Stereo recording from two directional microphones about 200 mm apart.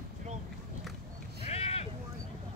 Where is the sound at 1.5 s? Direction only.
30° left (ahead or behind).